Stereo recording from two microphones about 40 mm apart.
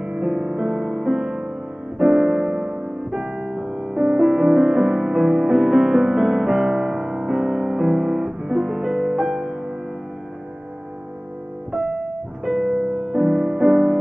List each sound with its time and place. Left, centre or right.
0.0 s music: right
0.3 s music: centre
3.5 s music: centre
12.6 s music: centre